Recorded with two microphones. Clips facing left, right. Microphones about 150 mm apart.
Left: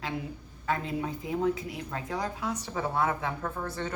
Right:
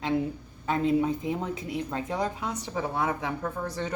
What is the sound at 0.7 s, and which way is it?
Speech, 25° right (ahead or behind).